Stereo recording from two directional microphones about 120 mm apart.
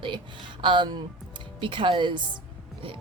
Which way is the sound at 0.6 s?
45° right (ahead or behind).